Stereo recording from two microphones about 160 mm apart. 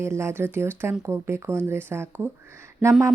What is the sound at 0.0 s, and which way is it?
Speech, 15° right (ahead or behind).